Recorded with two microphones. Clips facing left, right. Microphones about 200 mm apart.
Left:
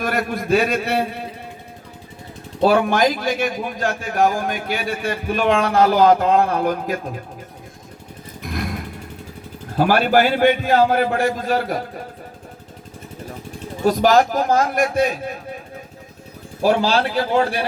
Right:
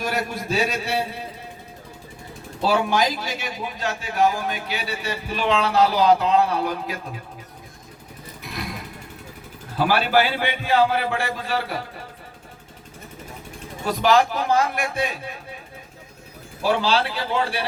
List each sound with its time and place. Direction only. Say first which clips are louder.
0.0 s a man's voice: left 4 dB; 55° left (ahead or behind)
2.6 s a man's voice: left 5 dB; 50° left (ahead or behind)
8.4 s vehicle: left 6 dB; 50° left (ahead or behind)
9.7 s a man's voice: left 4 dB; 45° left (ahead or behind)
13.8 s a man's voice: left 4 dB; 45° left (ahead or behind)
16.6 s a man's voice: left 4 dB; 45° left (ahead or behind)